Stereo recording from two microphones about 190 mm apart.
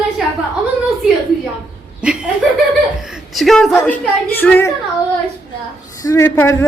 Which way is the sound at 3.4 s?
Centre (ahead or behind).